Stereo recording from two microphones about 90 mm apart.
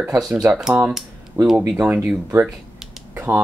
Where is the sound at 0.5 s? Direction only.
5° right (ahead or behind).